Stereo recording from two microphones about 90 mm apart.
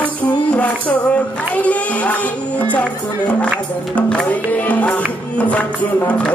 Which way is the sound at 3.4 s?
15° left (ahead or behind).